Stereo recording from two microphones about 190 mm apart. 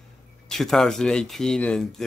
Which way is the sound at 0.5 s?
Centre (ahead or behind).